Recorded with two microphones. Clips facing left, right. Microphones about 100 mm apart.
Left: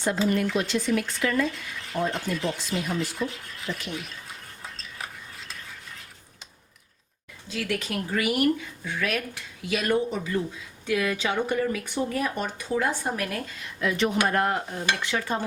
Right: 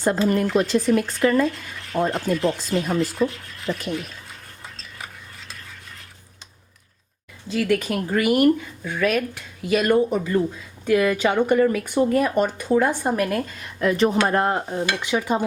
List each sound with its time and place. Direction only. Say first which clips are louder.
0.3 s speech: right 5 dB; 40° right (ahead or behind)
3.1 s speech: right 8 dB; centre (ahead or behind)
3.7 s speech: right 7 dB; 45° right (ahead or behind)
4.8 s stir: even; centre (ahead or behind)
7.5 s speech: right 8 dB; 50° right (ahead or behind)
14.3 s cutlery: right 4 dB; 30° right (ahead or behind)